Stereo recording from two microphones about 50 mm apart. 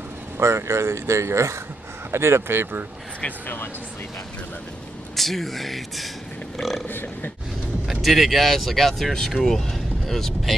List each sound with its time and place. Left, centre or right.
0.4 s speech: right
2.0 s speech: right
5.1 s speech: centre
7.9 s speech: centre